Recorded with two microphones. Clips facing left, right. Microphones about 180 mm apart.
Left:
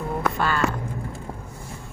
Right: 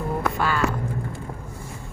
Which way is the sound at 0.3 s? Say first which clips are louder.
Even; 10° right (ahead or behind).